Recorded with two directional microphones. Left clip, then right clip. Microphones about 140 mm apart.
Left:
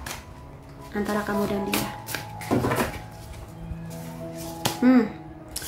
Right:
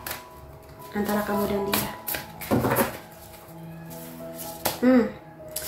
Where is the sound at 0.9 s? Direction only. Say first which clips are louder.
Even; 20° left (ahead or behind).